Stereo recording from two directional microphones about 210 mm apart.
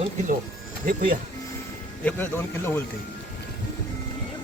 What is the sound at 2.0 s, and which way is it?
Speech, 10° left (ahead or behind).